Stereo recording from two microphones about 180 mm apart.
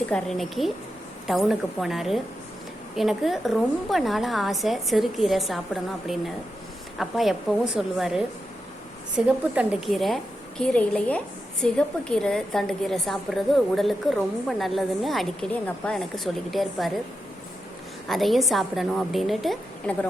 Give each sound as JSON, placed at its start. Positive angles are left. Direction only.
{"t": 0.1, "sound": "a woman's voice", "side_deg": 0}
{"t": 18.1, "sound": "a woman's voice", "side_deg": 0}